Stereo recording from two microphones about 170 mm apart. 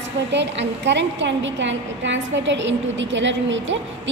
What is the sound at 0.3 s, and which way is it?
A woman's voice, 90° right.